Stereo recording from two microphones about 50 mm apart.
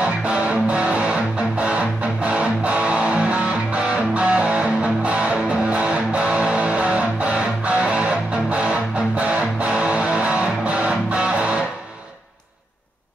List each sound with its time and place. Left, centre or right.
0.0 s music: right
2.2 s music: right